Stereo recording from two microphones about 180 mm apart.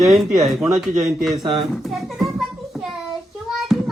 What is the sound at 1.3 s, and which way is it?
Speech, 25° right (ahead or behind).